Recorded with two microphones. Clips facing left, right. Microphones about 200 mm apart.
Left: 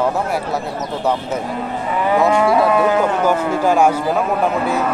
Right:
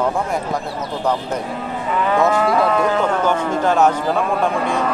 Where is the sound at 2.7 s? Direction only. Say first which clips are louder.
Left 2 dB; 10° left (ahead or behind).